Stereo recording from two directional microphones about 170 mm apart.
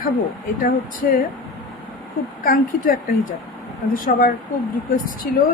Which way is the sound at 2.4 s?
55° left (ahead or behind).